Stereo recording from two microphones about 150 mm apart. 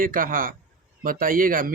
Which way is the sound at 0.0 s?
65° right (ahead or behind).